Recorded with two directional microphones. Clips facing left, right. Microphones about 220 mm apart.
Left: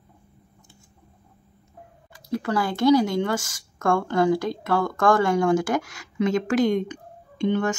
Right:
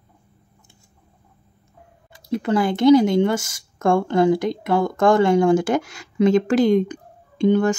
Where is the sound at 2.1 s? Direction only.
20° right (ahead or behind).